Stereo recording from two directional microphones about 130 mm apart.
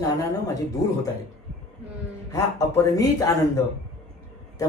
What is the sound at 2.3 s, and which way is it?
Speech, 25° left (ahead or behind).